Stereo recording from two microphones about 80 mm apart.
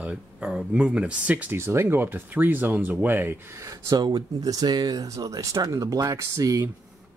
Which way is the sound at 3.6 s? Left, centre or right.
Right.